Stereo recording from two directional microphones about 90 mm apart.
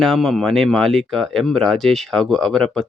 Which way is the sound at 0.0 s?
5° left (ahead or behind).